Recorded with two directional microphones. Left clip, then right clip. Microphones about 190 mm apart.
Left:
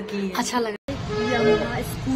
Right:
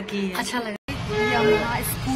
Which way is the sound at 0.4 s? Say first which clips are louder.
Left 5 dB; 70° left (ahead or behind).